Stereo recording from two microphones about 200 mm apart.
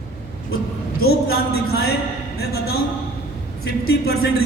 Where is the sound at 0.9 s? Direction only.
50° left (ahead or behind).